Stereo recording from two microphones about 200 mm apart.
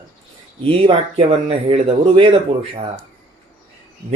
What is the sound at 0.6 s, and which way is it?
Speech, 25° right (ahead or behind).